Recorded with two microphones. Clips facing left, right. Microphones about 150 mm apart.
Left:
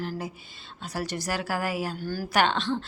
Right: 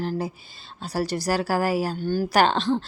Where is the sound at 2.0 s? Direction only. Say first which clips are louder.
Right 7 dB; 25° right (ahead or behind).